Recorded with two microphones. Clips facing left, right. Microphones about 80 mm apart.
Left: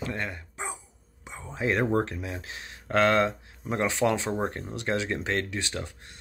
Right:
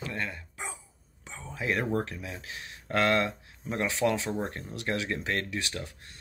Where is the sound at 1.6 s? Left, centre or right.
Left.